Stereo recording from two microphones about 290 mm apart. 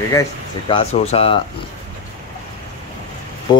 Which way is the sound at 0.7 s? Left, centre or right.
Left.